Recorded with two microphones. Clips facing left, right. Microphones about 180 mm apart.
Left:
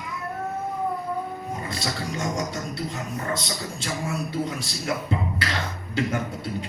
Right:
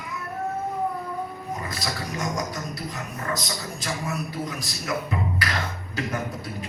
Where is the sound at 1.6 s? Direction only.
25° left (ahead or behind).